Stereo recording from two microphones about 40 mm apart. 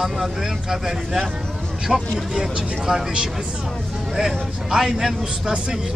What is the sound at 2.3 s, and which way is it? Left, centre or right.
Speech, centre.